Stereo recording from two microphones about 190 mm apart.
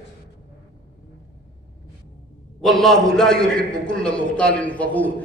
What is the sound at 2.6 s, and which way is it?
A man's voice, centre (ahead or behind).